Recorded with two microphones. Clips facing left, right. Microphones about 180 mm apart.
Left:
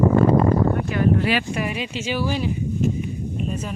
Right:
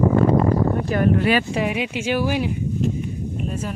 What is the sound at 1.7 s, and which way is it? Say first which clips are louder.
Speech: right 4 dB; 15° right (ahead or behind).